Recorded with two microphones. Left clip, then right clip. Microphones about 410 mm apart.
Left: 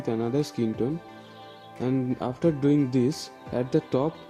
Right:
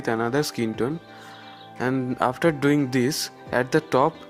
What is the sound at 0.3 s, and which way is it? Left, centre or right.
Speech, centre.